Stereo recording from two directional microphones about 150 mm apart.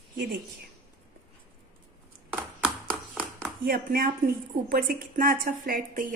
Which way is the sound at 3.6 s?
80° right.